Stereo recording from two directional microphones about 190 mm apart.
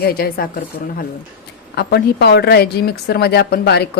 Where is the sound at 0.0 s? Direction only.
50° left (ahead or behind).